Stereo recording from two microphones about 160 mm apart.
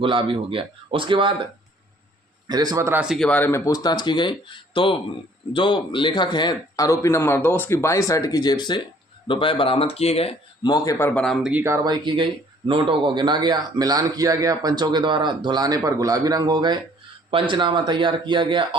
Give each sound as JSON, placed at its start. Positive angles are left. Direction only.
{"t": 0.0, "sound": "speech", "side_deg": -30}
{"t": 2.5, "sound": "speech", "side_deg": -25}
{"t": 3.0, "sound": "speech", "side_deg": -5}
{"t": 3.2, "sound": "speech", "side_deg": 10}
{"t": 10.7, "sound": "a man's voice", "side_deg": 25}
{"t": 11.4, "sound": "speech", "side_deg": -15}
{"t": 12.0, "sound": "speech", "side_deg": -30}